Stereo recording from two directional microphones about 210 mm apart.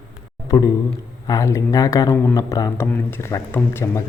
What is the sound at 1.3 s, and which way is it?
A man's voice, 15° left (ahead or behind).